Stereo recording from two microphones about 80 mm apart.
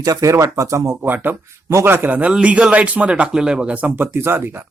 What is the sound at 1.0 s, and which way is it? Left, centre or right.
A man's voice, right.